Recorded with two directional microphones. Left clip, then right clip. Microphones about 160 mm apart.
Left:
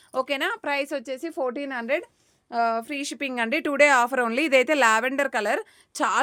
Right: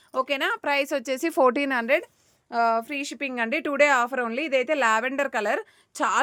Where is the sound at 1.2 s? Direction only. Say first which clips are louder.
Right 12 dB; 45° right (ahead or behind).